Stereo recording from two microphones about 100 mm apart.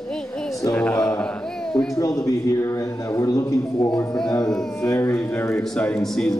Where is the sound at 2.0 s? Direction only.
35° left (ahead or behind).